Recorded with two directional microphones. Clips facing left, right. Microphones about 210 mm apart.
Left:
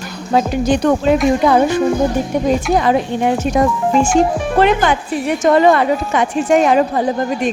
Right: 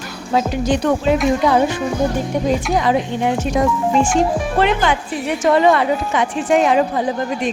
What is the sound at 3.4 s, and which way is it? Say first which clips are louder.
Speech: left 3 dB; 50° left (ahead or behind).